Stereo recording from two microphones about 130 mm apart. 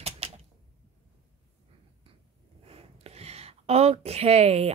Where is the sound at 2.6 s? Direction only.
50° right (ahead or behind).